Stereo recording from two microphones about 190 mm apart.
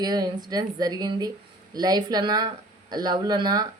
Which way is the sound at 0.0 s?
20° right (ahead or behind).